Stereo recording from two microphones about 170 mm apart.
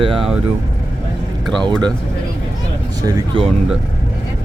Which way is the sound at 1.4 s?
5° left (ahead or behind).